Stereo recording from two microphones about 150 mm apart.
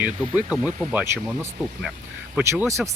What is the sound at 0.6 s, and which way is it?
Speech, 25° left (ahead or behind).